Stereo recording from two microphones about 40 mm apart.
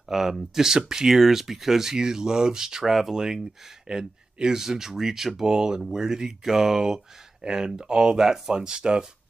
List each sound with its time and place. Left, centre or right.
0.1 s speech: centre